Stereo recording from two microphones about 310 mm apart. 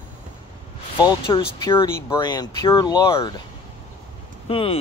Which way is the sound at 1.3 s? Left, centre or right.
Centre.